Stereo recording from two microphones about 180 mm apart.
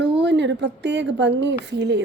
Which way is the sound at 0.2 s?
75° right (ahead or behind).